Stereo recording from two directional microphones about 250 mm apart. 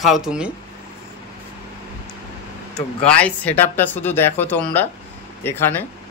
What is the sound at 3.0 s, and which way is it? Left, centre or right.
Speech, centre.